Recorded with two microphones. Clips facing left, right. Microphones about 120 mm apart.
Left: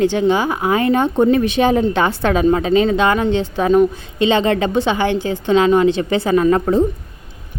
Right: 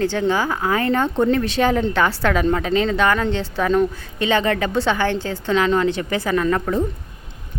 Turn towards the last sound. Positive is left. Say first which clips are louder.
# left 6 dB
turn(degrees=20)  # may be behind; listen again after turning